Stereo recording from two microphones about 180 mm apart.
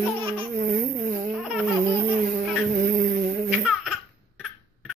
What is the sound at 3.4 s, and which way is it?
Laughter, 5° right (ahead or behind).